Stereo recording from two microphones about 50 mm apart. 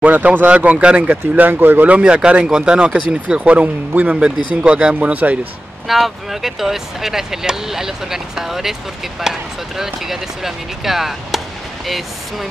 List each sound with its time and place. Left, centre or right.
0.0 s speech: right
1.3 s speech: right
1.9 s speech: right
4.1 s speech: right
5.9 s speech: centre